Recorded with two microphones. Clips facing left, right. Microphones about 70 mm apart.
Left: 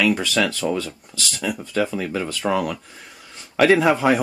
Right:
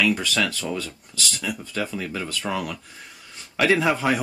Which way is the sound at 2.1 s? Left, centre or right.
Centre.